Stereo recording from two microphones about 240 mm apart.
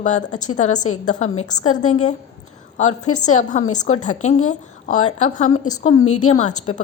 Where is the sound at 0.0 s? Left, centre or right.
Left.